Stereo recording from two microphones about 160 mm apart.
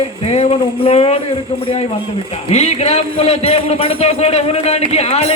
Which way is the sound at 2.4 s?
45° left (ahead or behind).